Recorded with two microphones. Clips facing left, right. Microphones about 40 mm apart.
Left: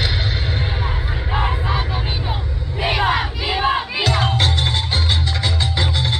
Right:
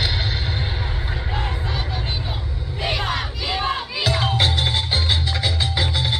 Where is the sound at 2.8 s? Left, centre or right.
Centre.